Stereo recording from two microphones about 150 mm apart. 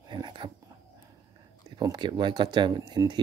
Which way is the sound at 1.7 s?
30° right (ahead or behind).